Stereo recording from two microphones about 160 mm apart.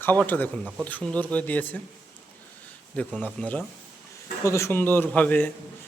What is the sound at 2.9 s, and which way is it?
A man's voice, 5° left (ahead or behind).